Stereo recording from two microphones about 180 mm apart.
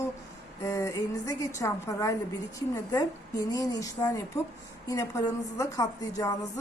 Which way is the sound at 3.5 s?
20° left (ahead or behind).